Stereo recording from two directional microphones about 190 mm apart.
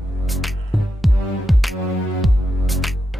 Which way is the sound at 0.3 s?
Centre (ahead or behind).